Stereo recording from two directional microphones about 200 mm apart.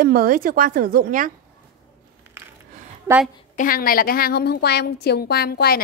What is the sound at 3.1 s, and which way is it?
Speech, 15° right (ahead or behind).